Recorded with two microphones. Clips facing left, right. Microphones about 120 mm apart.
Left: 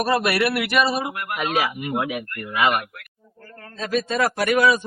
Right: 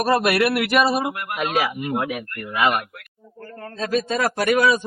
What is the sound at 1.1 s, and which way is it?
Speech, 25° right (ahead or behind).